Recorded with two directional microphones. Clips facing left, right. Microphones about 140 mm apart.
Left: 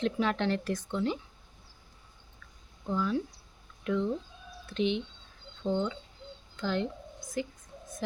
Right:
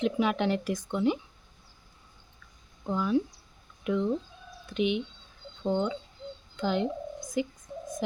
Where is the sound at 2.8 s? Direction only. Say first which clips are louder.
Right 3 dB; 15° right (ahead or behind).